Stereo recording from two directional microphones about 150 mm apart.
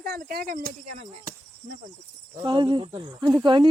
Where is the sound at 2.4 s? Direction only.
30° right (ahead or behind).